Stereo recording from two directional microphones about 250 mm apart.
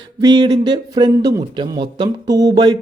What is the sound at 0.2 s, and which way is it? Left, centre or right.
A man's voice, centre.